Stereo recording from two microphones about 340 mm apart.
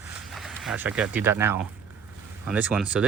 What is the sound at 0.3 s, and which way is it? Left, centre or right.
Speech, centre.